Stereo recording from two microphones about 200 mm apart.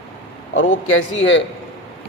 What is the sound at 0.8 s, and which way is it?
Speech, 75° left (ahead or behind).